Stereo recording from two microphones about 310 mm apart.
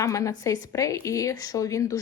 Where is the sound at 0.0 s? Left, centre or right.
Centre.